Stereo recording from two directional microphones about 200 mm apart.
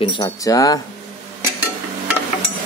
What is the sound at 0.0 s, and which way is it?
Speech, 20° left (ahead or behind).